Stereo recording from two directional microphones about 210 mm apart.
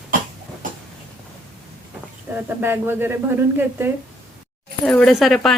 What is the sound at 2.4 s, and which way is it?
A woman's voice, 10° right (ahead or behind).